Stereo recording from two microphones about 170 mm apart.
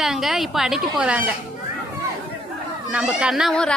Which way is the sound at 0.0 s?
Centre (ahead or behind).